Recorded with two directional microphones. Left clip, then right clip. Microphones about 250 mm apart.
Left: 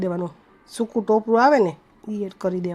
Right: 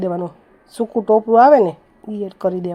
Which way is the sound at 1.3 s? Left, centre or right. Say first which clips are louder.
Right 7 dB; centre.